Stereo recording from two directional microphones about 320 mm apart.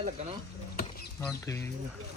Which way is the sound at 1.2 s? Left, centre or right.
Centre.